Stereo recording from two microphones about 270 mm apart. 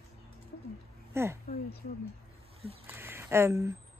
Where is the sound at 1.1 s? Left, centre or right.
Centre.